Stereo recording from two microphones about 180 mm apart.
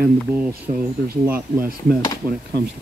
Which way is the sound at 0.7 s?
35° right (ahead or behind).